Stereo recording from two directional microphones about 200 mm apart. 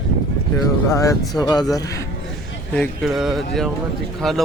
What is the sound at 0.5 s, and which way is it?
Speech, 15° left (ahead or behind).